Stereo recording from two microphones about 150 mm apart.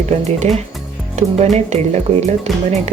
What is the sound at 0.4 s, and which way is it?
Speech, 50° right (ahead or behind).